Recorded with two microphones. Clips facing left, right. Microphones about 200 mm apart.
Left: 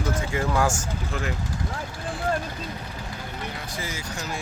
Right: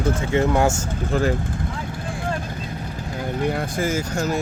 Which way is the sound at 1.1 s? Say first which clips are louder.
Right 11 dB; 35° right (ahead or behind).